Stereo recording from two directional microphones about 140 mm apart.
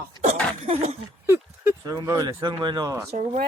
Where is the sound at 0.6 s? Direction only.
50° right (ahead or behind).